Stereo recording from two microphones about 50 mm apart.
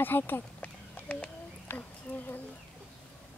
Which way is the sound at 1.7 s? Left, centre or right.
Left.